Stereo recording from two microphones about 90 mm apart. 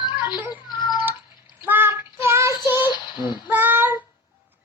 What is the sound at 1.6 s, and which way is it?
Child singing, 25° right (ahead or behind).